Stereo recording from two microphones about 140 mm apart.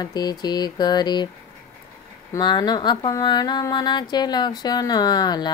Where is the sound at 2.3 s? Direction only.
30° left (ahead or behind).